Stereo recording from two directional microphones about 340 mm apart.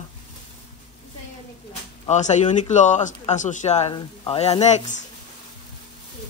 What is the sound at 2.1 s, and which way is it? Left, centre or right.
Speech, left.